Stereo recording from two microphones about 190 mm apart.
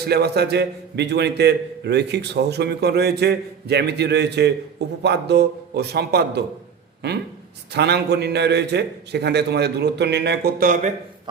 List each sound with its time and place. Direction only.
0.1 s a man's voice: 60° right (ahead or behind)
7.7 s a man's voice: 60° right (ahead or behind)